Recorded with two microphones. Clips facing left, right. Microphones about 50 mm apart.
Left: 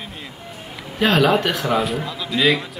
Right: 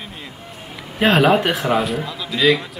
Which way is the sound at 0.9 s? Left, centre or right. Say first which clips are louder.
Right 2 dB; right.